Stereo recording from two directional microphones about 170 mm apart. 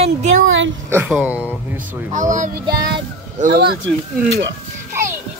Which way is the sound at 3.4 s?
60° right (ahead or behind).